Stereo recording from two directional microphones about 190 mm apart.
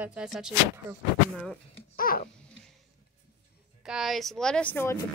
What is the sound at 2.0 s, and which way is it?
Babbling, 50° left (ahead or behind).